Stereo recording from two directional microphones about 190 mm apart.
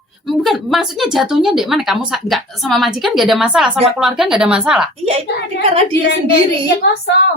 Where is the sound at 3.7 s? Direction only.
35° right (ahead or behind).